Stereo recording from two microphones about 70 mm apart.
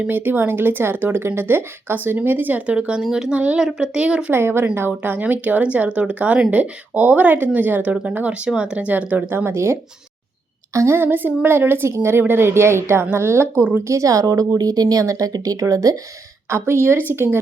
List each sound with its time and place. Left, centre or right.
0.1 s speech: right; by 4.3 s centre
4.3 s speech: right
9.3 s speech: right
10.8 s speech: right
11.0 s speech: right
16.6 s speech: right